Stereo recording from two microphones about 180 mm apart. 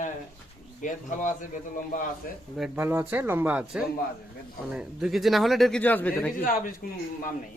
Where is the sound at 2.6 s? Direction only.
10° right (ahead or behind); by 6.3 s 10° left (ahead or behind).